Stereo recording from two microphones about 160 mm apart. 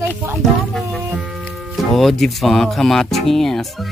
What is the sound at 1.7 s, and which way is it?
Speech, centre (ahead or behind).